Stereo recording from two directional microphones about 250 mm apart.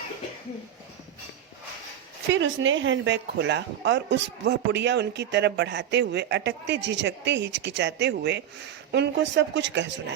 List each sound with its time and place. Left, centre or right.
2.3 s speech: right